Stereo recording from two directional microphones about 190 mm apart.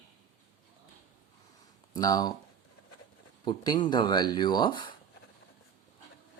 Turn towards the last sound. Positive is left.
turn(degrees=25)  # may be behind; listen again after turning